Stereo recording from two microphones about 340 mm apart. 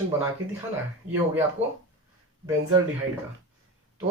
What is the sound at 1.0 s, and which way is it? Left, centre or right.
Speech, right.